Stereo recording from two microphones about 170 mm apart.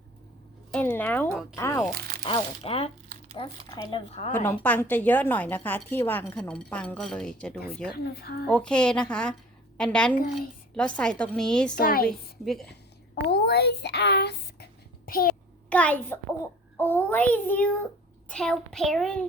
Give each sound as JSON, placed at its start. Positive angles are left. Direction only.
{"t": 0.7, "sound": "a child's voice", "side_deg": 10}
{"t": 2.0, "sound": "crunch", "side_deg": -65}
{"t": 2.2, "sound": "speech", "side_deg": 35}
{"t": 4.4, "sound": "a child's voice", "side_deg": 10}
{"t": 7.9, "sound": "a woman's voice", "side_deg": 65}
{"t": 8.4, "sound": "a woman's voice", "side_deg": 5}
{"t": 11.7, "sound": "a woman's voice", "side_deg": 60}
{"t": 12.0, "sound": "a woman's voice", "side_deg": 0}
{"t": 13.3, "sound": "a child's voice", "side_deg": 70}
{"t": 15.7, "sound": "a child's voice", "side_deg": 10}